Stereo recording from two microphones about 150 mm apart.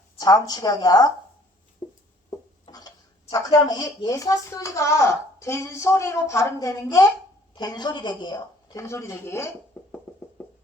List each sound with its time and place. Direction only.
0.2 s speech: 25° left (ahead or behind)
1.8 s a sound: 25° left (ahead or behind)
3.3 s speech: 25° left (ahead or behind)
9.7 s music: 10° left (ahead or behind)